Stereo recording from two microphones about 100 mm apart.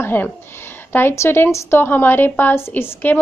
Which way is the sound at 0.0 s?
20° left (ahead or behind).